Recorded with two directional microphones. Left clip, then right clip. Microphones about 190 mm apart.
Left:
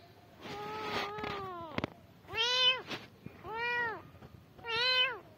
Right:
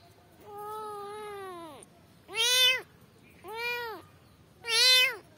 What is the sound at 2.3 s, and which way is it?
Cat, 55° right (ahead or behind).